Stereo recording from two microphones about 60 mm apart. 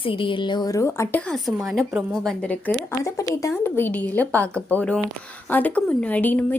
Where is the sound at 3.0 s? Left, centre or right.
Left.